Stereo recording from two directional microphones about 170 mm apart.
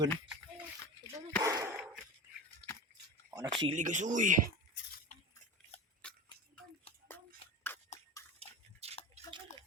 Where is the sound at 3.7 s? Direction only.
45° right (ahead or behind).